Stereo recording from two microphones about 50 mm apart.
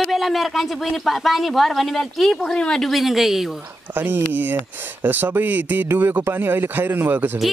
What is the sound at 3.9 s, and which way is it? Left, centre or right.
A man's voice, right.